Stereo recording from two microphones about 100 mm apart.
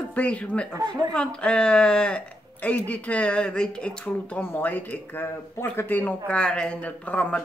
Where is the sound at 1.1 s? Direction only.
10° left (ahead or behind).